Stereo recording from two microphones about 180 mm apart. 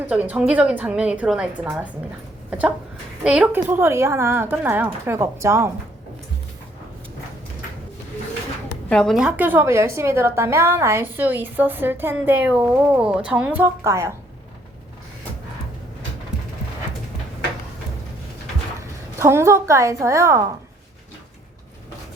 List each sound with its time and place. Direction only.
0.1 s a woman's voice: 5° right (ahead or behind)
2.5 s a sound: 5° right (ahead or behind)
3.2 s a woman's voice: 5° right (ahead or behind)
8.9 s a woman's voice: 5° left (ahead or behind); by 14.1 s 15° right (ahead or behind)
18.8 s a woman's voice: 15° right (ahead or behind)